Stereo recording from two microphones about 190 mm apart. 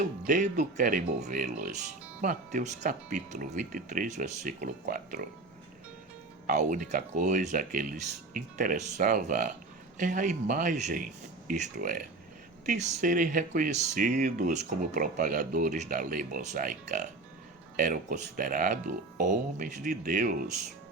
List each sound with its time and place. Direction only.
0.3 s speech: 40° right (ahead or behind)
6.5 s speech: 40° right (ahead or behind)